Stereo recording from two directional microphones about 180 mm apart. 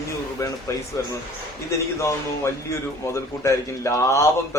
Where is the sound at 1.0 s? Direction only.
15° left (ahead or behind).